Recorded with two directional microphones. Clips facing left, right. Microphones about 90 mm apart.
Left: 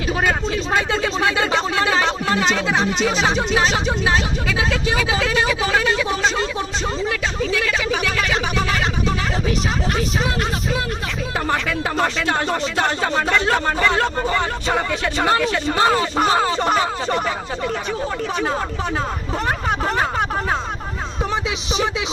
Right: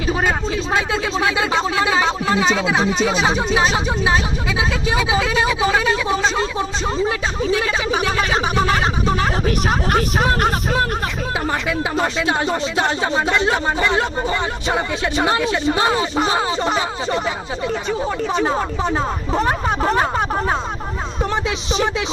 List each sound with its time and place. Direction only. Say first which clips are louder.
0.1 s speech: right 1 dB; 20° right (ahead or behind)
9.5 s speech: right 3 dB; 50° right (ahead or behind)
12.0 s speech: right 1 dB; 15° right (ahead or behind)
19.5 s speech: even; 15° right (ahead or behind)